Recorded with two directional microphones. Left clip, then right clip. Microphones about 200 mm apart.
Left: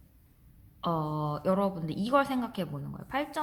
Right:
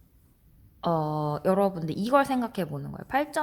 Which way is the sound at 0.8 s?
40° right (ahead or behind).